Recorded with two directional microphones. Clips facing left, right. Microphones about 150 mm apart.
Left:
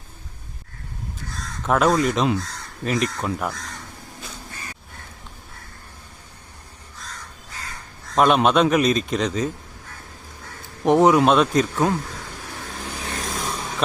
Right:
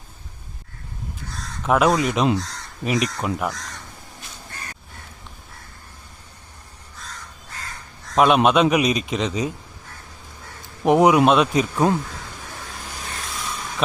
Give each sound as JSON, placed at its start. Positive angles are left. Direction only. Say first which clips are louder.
{"t": 1.6, "sound": "a man's voice", "louder": "even", "side_deg": -5}
{"t": 8.1, "sound": "a man's voice", "louder": "right 1 dB", "side_deg": -5}
{"t": 10.8, "sound": "a man's voice", "louder": "even", "side_deg": -5}
{"t": 12.9, "sound": "vehicle", "louder": "left 5 dB", "side_deg": 40}